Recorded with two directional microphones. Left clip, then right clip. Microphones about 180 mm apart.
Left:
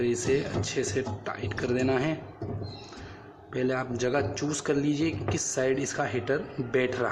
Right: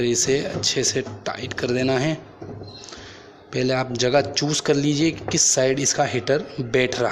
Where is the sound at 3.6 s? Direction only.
30° right (ahead or behind).